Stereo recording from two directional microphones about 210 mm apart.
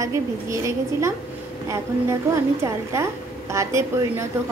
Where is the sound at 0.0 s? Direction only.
15° right (ahead or behind).